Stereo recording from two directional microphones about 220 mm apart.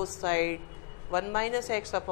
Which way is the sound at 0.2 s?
15° left (ahead or behind).